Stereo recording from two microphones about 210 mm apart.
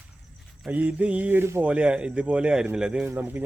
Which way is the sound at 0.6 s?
5° right (ahead or behind).